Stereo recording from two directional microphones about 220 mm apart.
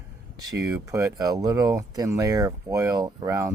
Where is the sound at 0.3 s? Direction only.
15° right (ahead or behind).